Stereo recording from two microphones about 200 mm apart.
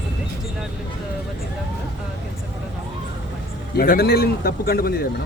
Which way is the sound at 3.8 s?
50° left (ahead or behind).